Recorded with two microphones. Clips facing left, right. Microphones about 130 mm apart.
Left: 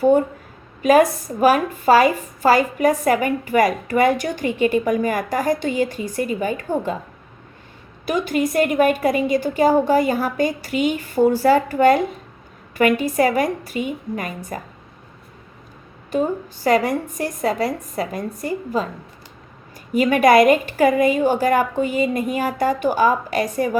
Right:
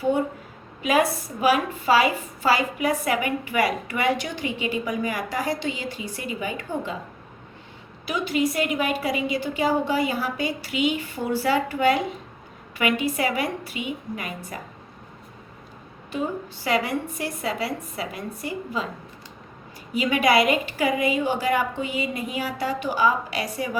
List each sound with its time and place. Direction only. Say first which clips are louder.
0.8 s a woman's voice: left 7 dB; 45° left (ahead or behind)
8.0 s a woman's voice: left 4 dB; 45° left (ahead or behind)
16.1 s a woman's voice: left 7 dB; 40° left (ahead or behind)
19.9 s a woman's voice: left 6 dB; 50° left (ahead or behind)